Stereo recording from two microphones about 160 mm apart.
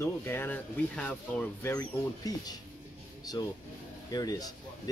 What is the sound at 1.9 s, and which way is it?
Speech, 20° left (ahead or behind).